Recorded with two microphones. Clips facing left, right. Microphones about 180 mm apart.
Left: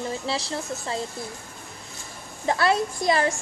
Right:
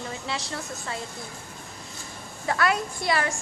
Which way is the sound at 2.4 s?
30° left (ahead or behind).